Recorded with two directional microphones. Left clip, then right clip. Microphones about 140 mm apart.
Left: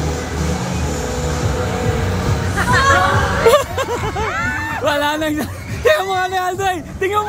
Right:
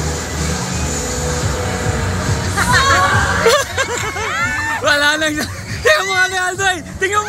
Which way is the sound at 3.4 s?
25° left (ahead or behind).